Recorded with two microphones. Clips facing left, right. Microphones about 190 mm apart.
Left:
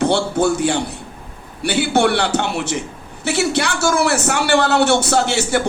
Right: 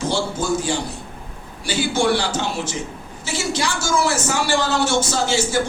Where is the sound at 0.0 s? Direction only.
65° left (ahead or behind).